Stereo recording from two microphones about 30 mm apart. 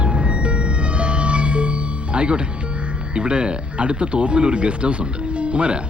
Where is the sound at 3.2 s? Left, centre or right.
Right.